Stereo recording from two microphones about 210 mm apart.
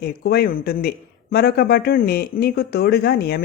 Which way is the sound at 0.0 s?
50° left (ahead or behind).